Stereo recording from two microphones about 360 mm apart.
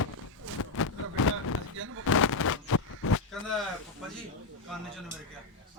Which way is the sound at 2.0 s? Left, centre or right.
Left.